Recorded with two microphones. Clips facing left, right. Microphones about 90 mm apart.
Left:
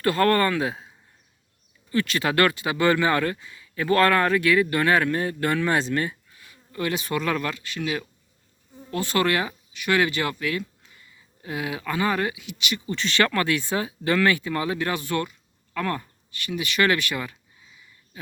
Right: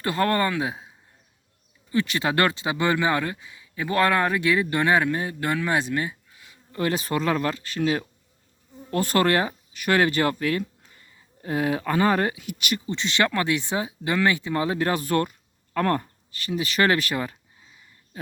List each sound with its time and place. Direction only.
0.0 s speech: 20° right (ahead or behind)
6.7 s speech: 35° right (ahead or behind)
12.9 s speech: 20° right (ahead or behind); by 18.2 s 40° right (ahead or behind)